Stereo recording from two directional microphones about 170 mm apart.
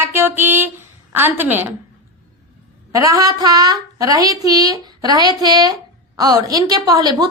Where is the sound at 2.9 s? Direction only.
20° right (ahead or behind).